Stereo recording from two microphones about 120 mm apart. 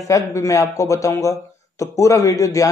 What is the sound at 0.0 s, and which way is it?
Speech, 25° left (ahead or behind).